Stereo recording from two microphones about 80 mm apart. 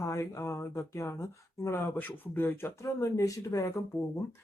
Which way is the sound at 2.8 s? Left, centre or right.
Left.